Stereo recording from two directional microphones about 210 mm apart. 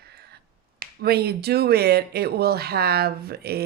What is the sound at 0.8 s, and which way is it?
Speech, 50° right (ahead or behind).